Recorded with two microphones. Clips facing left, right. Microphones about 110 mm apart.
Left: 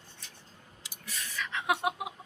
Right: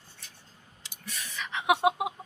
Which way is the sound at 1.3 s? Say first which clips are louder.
Right 4 dB; 20° right (ahead or behind).